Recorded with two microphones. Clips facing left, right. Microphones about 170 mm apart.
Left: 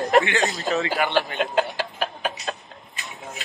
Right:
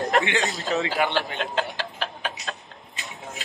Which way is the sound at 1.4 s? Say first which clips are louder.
Left 5 dB; 10° left (ahead or behind).